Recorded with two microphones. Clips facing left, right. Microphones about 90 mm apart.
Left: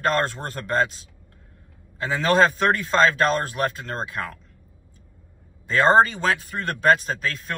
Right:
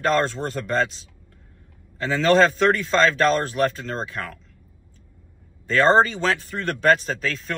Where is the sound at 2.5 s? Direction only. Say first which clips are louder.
Right 2 dB; 45° left (ahead or behind).